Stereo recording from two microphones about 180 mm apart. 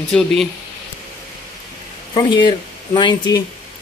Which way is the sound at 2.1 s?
25° left (ahead or behind).